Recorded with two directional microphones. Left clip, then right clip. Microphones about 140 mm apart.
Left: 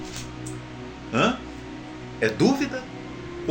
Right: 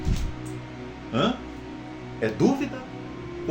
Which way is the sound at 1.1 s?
15° right (ahead or behind).